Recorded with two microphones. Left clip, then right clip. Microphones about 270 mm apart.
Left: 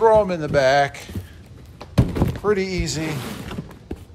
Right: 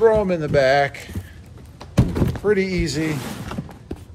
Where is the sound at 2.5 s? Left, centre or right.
Centre.